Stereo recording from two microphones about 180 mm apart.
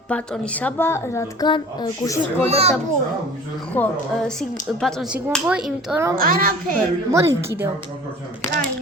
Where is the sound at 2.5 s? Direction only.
35° right (ahead or behind).